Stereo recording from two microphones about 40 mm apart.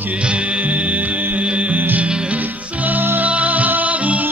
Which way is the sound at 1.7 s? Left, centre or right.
Right.